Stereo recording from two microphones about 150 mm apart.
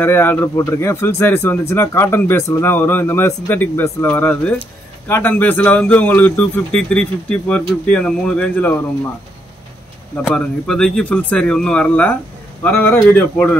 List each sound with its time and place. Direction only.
0.0 s speech: 15° left (ahead or behind)
10.2 s speech: 5° left (ahead or behind)